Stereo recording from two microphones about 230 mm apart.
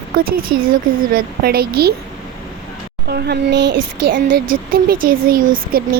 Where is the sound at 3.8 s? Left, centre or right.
Right.